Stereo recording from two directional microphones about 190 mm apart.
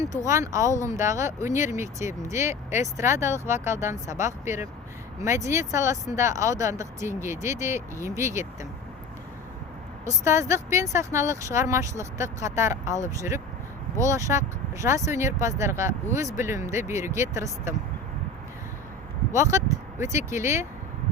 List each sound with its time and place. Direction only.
0.3 s speech: 15° right (ahead or behind)
10.1 s speech: 15° right (ahead or behind)
19.3 s speech: 15° right (ahead or behind)